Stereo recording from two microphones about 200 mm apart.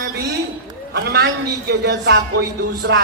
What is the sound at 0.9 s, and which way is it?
A man's voice, 55° right (ahead or behind).